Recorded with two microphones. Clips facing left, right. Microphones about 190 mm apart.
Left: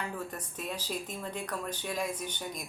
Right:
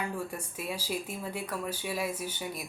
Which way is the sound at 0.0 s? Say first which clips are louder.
Right 3 dB; 10° right (ahead or behind).